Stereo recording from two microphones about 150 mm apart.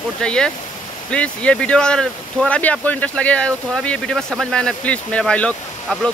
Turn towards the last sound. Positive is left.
turn(degrees=5)  # may be behind; listen again after turning